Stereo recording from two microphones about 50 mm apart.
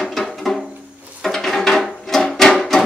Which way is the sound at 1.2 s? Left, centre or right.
Centre.